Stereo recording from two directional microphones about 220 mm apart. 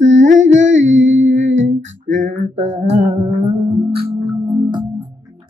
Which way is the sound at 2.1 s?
30° right (ahead or behind).